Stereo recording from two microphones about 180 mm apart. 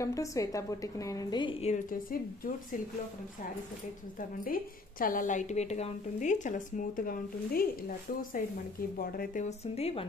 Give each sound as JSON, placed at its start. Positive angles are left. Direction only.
{"t": 0.0, "sound": "a woman's voice", "side_deg": 20}
{"t": 1.9, "sound": "a woman's voice", "side_deg": 50}
{"t": 4.5, "sound": "a woman's voice", "side_deg": 50}
{"t": 8.9, "sound": "a woman's voice", "side_deg": 55}